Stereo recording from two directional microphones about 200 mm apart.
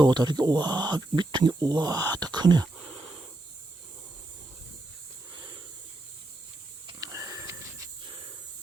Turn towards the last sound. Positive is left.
turn(degrees=-15)  # may be behind; listen again after turning